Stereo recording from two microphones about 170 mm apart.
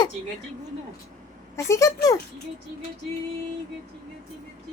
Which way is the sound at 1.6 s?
20° left (ahead or behind).